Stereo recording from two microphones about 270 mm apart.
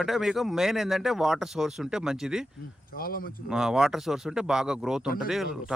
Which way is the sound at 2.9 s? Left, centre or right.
Left.